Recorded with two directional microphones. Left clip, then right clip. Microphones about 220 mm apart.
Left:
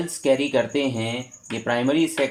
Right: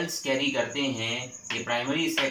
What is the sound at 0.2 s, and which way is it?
Speech, 45° left (ahead or behind).